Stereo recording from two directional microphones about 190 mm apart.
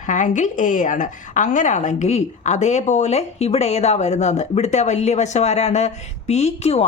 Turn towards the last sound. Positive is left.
turn(degrees=35)  # may be behind; listen again after turning